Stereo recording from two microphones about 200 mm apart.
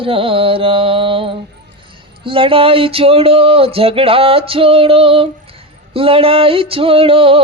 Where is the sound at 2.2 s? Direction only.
25° right (ahead or behind).